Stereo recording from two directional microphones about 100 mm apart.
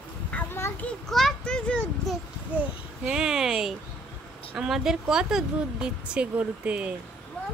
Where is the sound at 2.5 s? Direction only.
5° right (ahead or behind).